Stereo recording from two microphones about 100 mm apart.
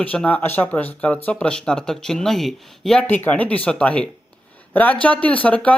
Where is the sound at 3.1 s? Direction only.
20° left (ahead or behind).